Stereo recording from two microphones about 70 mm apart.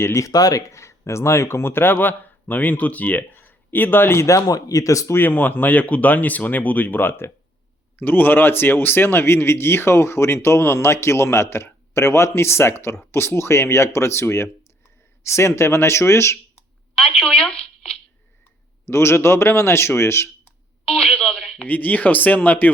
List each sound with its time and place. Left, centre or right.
0.0 s speech: left
0.3 s speech: left
5.1 s speech: left
16.9 s telephone: centre
18.9 s speech: left
20.8 s a sound: centre
21.7 s speech: left